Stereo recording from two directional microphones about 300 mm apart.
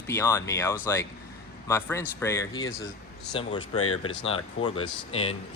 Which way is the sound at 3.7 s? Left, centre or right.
Left.